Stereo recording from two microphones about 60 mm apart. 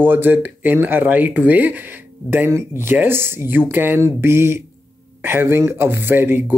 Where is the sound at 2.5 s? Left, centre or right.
Right.